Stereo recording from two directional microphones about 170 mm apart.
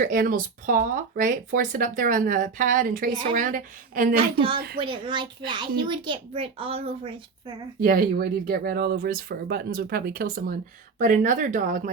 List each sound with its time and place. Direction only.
0.0 s speech: 55° right (ahead or behind)
3.1 s speech: 25° right (ahead or behind)
3.3 s speech: 50° right (ahead or behind)
4.8 s a child's voice: 30° right (ahead or behind)
7.8 s speech: 60° right (ahead or behind)